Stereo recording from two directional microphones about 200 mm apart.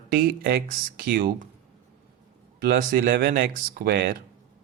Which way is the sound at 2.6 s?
45° right (ahead or behind).